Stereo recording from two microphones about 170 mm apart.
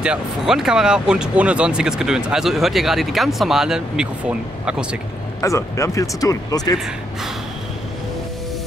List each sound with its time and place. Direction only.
0.0 s speech: 5° right (ahead or behind)
5.4 s speech: 20° left (ahead or behind)